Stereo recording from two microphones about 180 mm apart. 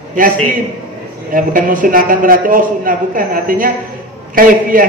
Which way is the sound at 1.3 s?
50° right (ahead or behind).